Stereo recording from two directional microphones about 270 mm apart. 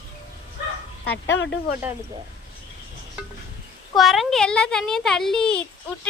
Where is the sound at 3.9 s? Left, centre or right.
Centre.